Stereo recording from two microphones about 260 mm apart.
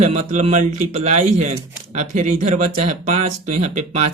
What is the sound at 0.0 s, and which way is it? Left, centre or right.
Speech, right.